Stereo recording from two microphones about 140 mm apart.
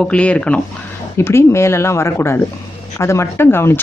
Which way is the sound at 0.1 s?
10° left (ahead or behind).